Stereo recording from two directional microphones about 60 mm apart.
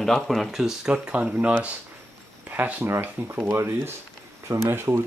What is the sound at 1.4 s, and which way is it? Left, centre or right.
Speech, right.